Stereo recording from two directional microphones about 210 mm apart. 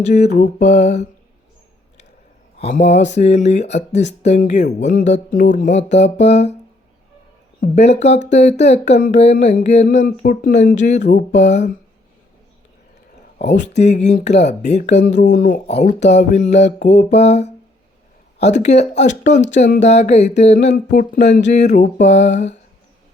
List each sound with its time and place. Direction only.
0.0 s speech: 35° left (ahead or behind)
2.7 s speech: 30° left (ahead or behind)
7.8 s speech: 30° left (ahead or behind)
13.4 s speech: 35° left (ahead or behind)